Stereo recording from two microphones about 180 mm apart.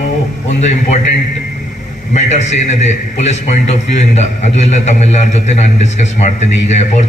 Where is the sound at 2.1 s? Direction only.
40° left (ahead or behind).